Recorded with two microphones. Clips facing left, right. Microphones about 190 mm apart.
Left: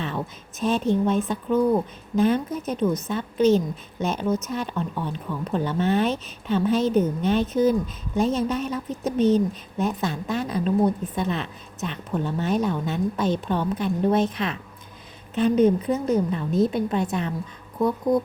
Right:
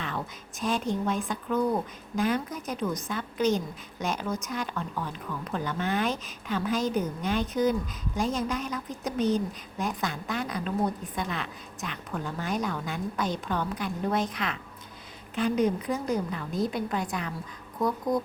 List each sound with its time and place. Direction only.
0.6 s a woman's voice: 20° left (ahead or behind)